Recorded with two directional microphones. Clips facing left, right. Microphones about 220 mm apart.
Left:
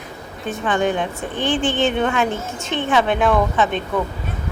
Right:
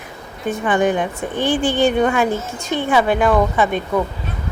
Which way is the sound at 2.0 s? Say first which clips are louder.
Right 3 dB; 10° right (ahead or behind).